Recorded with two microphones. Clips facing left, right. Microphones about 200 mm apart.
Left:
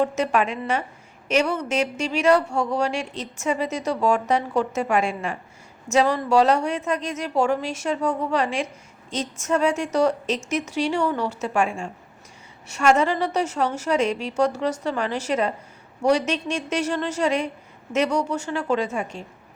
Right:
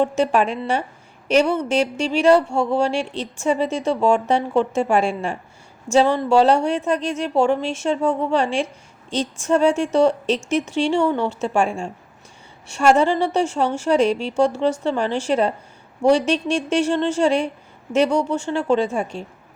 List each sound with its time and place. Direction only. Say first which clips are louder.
0.0 s a woman's voice: right 3 dB; 30° right (ahead or behind)